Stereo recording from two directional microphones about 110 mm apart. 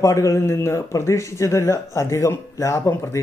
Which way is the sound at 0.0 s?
25° left (ahead or behind).